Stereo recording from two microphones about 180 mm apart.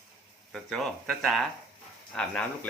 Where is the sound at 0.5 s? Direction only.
Centre (ahead or behind).